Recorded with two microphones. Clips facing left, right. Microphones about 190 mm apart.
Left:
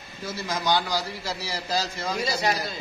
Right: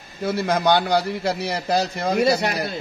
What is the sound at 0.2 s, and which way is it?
A man's voice, 60° right (ahead or behind).